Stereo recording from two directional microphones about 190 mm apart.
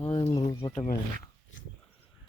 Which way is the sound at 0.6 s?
20° left (ahead or behind).